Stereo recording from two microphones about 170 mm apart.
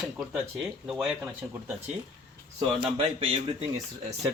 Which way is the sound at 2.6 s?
30° right (ahead or behind).